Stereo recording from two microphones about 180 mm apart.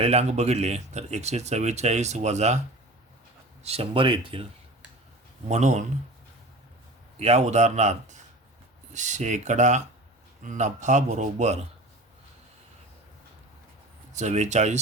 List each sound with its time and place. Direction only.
0.0 s speech: 35° right (ahead or behind)
3.6 s speech: 35° right (ahead or behind)
5.5 s speech: 40° right (ahead or behind)
7.2 s speech: 35° right (ahead or behind)
14.1 s speech: 40° right (ahead or behind)